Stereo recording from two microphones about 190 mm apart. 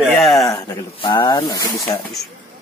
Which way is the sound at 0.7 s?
20° left (ahead or behind).